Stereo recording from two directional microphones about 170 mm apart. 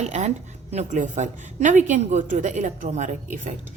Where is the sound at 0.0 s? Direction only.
40° right (ahead or behind).